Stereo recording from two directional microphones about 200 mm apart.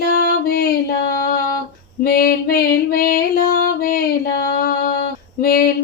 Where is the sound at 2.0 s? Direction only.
50° left (ahead or behind).